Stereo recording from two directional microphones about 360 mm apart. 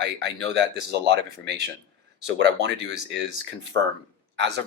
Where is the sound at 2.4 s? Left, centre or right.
Right.